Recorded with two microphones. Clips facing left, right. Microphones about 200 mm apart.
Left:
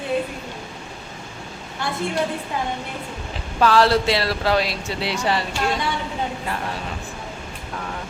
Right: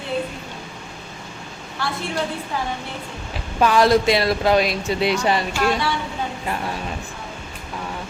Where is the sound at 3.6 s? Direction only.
15° right (ahead or behind).